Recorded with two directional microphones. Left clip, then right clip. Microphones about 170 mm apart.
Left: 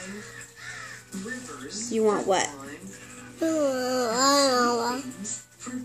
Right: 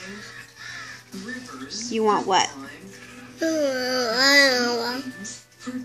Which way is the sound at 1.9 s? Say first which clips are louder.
Right 3 dB; 20° right (ahead or behind).